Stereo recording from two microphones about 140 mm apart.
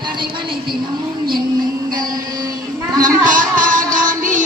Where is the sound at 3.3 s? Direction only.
70° right (ahead or behind).